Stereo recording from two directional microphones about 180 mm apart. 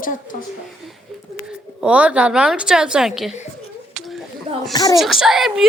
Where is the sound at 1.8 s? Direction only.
5° right (ahead or behind).